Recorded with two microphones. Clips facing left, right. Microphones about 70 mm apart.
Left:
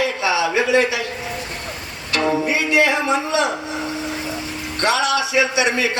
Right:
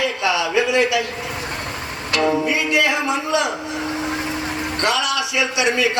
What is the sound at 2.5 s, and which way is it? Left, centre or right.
A man's voice, left.